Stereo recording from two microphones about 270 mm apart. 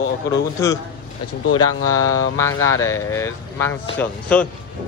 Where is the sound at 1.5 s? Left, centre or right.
Centre.